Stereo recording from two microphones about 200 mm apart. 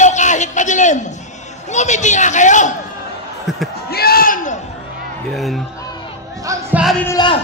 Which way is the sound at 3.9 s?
50° left (ahead or behind).